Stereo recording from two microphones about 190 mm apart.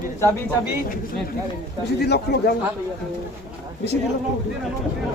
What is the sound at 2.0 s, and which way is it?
Speech, 60° left (ahead or behind).